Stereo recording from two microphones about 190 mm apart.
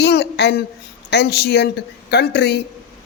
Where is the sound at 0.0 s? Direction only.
60° left (ahead or behind).